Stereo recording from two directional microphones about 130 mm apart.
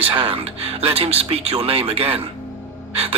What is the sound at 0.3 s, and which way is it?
Speech, 50° right (ahead or behind).